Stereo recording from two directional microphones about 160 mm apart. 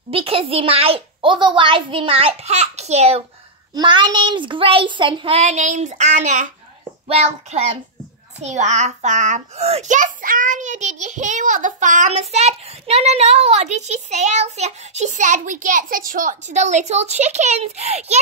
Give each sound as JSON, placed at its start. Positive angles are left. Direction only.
{"t": 0.1, "sound": "a child's voice", "side_deg": -35}
{"t": 3.7, "sound": "a child's voice", "side_deg": -30}